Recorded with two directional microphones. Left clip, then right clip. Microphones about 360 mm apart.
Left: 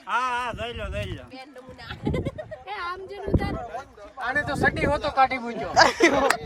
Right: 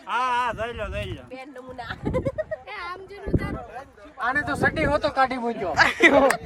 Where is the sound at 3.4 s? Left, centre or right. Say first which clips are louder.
Left 2 dB; left.